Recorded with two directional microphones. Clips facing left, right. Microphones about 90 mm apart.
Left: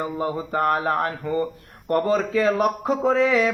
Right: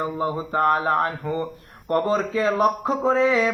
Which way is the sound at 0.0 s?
30° right (ahead or behind).